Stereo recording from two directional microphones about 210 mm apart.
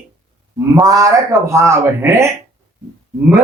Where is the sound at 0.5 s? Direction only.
15° right (ahead or behind).